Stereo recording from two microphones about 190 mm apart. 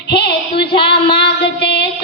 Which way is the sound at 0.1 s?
60° left (ahead or behind).